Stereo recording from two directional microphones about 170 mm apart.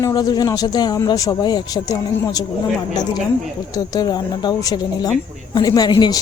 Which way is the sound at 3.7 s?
20° left (ahead or behind).